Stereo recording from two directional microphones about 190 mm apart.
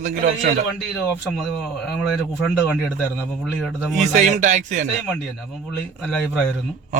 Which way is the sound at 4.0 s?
40° right (ahead or behind).